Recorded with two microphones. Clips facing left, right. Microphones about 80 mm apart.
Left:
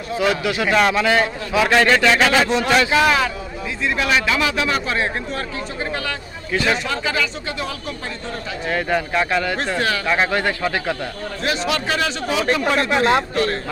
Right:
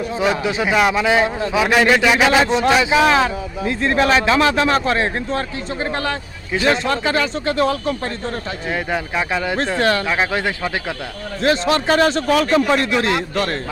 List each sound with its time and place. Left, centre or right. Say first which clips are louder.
0.1 s a man's voice: left 2 dB; right
0.7 s a man's voice: right 1 dB; centre
2.4 s a man's voice: right 2 dB; right
3.1 s a man's voice: right 3 dB; right
3.6 s a man's voice: right 5 dB; right
8.7 s a man's voice: left 2 dB; centre
11.4 s a man's voice: right 6 dB; right
12.8 s speech: left 2 dB; left